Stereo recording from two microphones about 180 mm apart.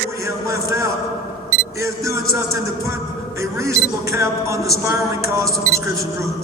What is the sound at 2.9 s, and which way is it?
A man's voice, 15° right (ahead or behind).